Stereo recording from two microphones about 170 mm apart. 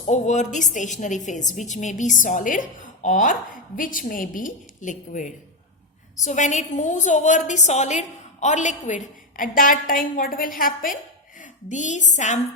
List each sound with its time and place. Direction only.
0.0 s a woman's voice: 45° left (ahead or behind)